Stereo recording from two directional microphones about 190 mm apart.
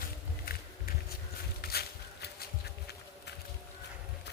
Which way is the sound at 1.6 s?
55° left (ahead or behind).